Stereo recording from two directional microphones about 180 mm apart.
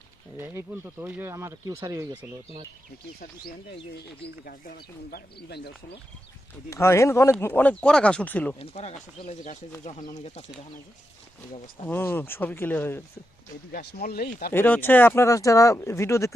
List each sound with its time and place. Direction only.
0.3 s speech: 15° right (ahead or behind)
4.4 s speech: 55° left (ahead or behind)
6.7 s speech: 15° left (ahead or behind)
8.5 s speech: 35° left (ahead or behind)
11.9 s speech: 10° left (ahead or behind)
13.7 s speech: 60° left (ahead or behind)
14.5 s speech: 10° left (ahead or behind)